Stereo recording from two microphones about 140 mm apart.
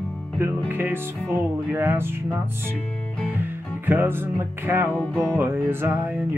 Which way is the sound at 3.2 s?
15° right (ahead or behind).